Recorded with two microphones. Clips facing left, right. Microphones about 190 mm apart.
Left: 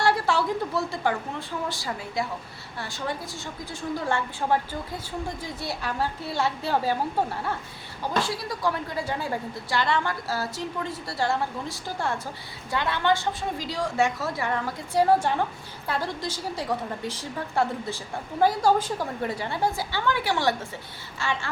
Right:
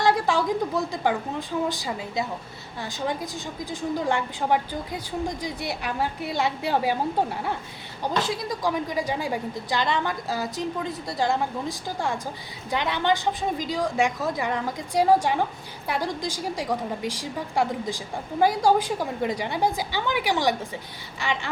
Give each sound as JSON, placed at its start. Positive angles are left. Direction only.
{"t": 0.0, "sound": "a woman's voice", "side_deg": -15}
{"t": 8.2, "sound": "a woman's voice", "side_deg": -15}